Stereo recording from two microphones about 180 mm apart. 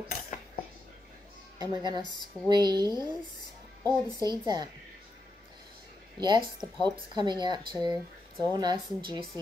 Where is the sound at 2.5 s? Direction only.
25° right (ahead or behind).